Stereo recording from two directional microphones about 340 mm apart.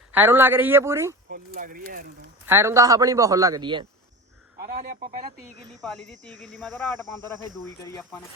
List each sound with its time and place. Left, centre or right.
0.1 s a man's voice: centre
1.5 s speech: right
2.5 s a man's voice: centre
4.6 s speech: right
5.8 s speech: centre